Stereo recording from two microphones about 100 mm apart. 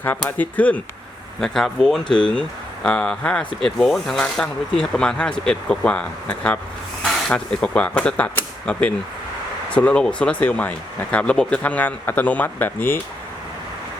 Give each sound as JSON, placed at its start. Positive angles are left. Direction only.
{"t": 0.2, "sound": "speech", "side_deg": 15}
{"t": 1.4, "sound": "speech", "side_deg": 5}